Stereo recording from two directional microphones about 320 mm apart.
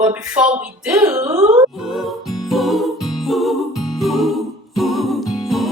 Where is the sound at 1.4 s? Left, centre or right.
Centre.